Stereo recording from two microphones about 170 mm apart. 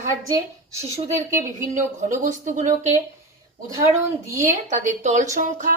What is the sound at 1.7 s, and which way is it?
Speech, 50° right (ahead or behind).